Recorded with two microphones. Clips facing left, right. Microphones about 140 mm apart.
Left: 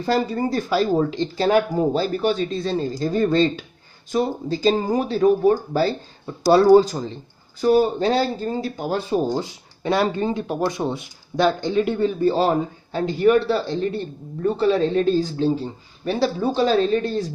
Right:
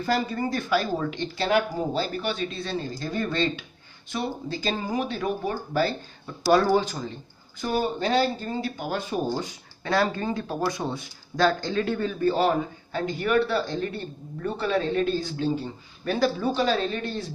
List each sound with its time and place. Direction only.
0.0 s speech: 35° left (ahead or behind)